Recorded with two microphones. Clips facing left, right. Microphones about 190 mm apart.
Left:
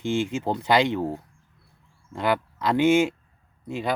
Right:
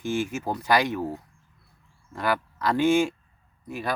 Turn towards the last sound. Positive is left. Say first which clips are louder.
# left 3 dB
turn(degrees=25)  # may be behind; listen again after turning